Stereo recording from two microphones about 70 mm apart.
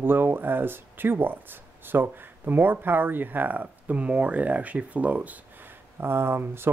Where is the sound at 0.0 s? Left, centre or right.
Right.